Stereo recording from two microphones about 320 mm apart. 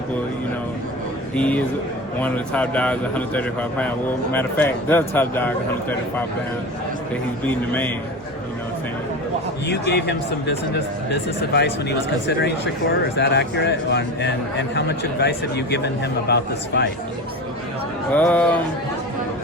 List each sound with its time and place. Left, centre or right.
1.4 s speech: centre
7.4 s speech: centre
9.6 s a man's voice: left
13.1 s a man's voice: left
18.1 s speech: centre